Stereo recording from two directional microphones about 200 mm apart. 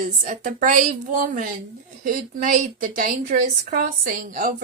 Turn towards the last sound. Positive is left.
turn(degrees=-45)  # may be behind; listen again after turning